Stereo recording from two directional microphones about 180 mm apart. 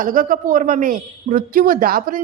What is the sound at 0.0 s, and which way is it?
A man's voice, 50° right (ahead or behind).